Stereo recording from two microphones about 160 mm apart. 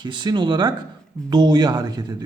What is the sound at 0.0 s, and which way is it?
A man's voice, 30° right (ahead or behind).